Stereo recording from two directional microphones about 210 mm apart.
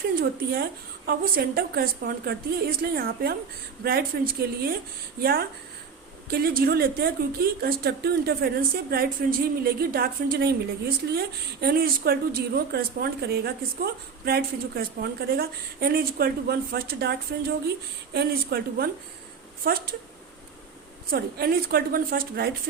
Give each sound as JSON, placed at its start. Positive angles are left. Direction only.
{"t": 0.2, "sound": "a woman's voice", "side_deg": -45}
{"t": 21.1, "sound": "a woman's voice", "side_deg": -45}